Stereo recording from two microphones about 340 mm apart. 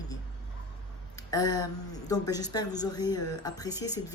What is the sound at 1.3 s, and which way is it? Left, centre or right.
Speech, centre.